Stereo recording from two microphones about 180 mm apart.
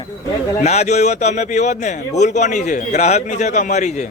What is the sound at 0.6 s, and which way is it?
A man's voice, 40° left (ahead or behind).